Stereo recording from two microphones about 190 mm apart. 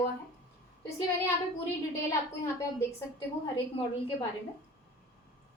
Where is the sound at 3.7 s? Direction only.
30° left (ahead or behind).